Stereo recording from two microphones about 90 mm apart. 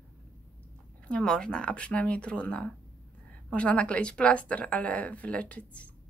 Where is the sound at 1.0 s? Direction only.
10° left (ahead or behind).